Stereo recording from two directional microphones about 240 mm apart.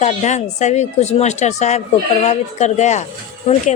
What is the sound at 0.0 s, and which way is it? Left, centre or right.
A woman's voice, left.